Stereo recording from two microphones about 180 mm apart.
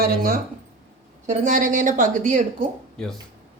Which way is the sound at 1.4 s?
45° right (ahead or behind).